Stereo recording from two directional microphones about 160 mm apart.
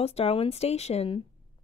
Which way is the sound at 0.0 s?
40° left (ahead or behind).